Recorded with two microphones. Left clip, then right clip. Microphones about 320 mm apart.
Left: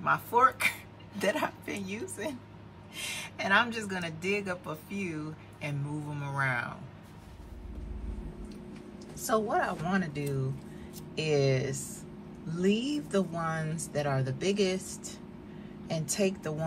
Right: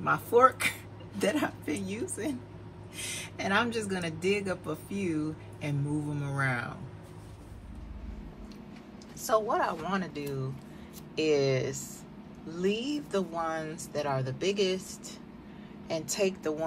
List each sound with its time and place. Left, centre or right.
0.0 s speech: centre
9.2 s a woman's voice: centre